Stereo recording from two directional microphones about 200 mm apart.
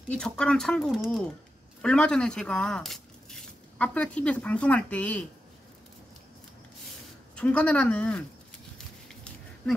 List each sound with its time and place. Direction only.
0.1 s speech: 5° left (ahead or behind)
7.3 s speech: 5° left (ahead or behind)